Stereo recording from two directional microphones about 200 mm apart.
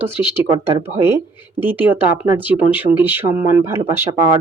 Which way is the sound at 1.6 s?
10° right (ahead or behind).